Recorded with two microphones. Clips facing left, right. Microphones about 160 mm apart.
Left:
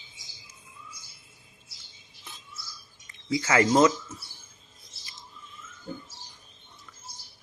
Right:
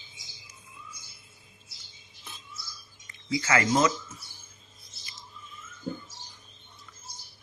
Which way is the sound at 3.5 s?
20° left (ahead or behind).